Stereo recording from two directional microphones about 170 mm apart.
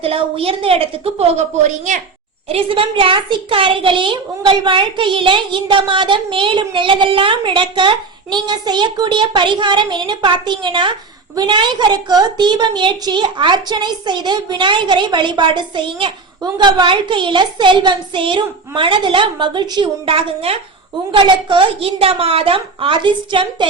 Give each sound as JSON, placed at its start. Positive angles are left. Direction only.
{"t": 0.0, "sound": "a woman's voice", "side_deg": -35}
{"t": 2.5, "sound": "a woman's voice", "side_deg": -35}